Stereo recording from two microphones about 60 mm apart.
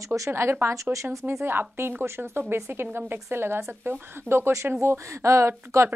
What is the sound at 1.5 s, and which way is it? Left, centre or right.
A woman's voice, right.